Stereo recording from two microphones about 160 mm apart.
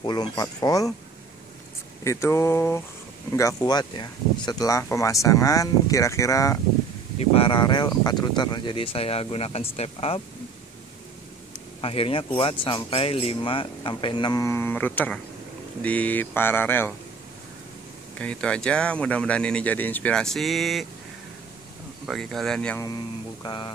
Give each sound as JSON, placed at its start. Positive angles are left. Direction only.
{"t": 0.0, "sound": "speech", "side_deg": 25}
{"t": 2.0, "sound": "speech", "side_deg": 15}
{"t": 7.2, "sound": "speech", "side_deg": 35}
{"t": 11.8, "sound": "speech", "side_deg": 35}
{"t": 18.2, "sound": "speech", "side_deg": 5}
{"t": 22.0, "sound": "speech", "side_deg": 0}
{"t": 23.4, "sound": "speech", "side_deg": 30}